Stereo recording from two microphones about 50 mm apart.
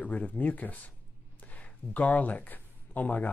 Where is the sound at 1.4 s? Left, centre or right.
Left.